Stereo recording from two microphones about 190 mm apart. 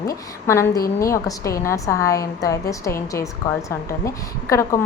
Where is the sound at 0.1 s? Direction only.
15° left (ahead or behind).